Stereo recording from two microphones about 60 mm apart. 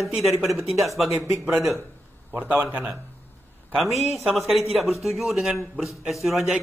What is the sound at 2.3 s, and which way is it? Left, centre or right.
Speech, right.